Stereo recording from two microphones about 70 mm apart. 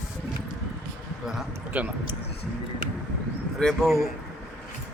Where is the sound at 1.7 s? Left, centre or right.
Right.